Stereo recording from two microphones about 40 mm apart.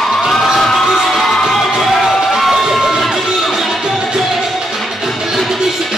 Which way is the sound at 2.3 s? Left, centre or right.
Centre.